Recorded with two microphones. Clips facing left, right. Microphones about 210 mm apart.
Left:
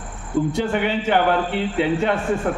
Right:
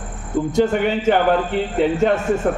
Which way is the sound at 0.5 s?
45° right (ahead or behind).